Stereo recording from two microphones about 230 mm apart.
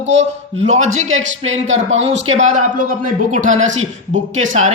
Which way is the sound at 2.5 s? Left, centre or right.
Right.